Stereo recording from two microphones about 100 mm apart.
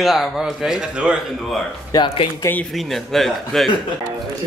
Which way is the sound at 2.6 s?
Centre (ahead or behind).